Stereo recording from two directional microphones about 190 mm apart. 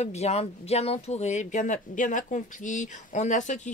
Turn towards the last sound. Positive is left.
turn(degrees=40)  # may be behind; listen again after turning